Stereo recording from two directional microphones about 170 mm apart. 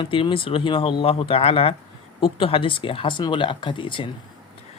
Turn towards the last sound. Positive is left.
turn(degrees=30)  # may be behind; listen again after turning